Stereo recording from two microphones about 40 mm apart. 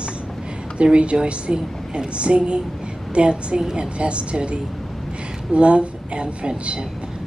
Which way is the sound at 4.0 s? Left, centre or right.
Right.